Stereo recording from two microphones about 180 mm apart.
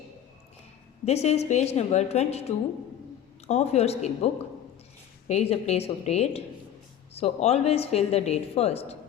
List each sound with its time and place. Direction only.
1.0 s a woman's voice: 35° left (ahead or behind)
5.3 s a woman's voice: 35° left (ahead or behind)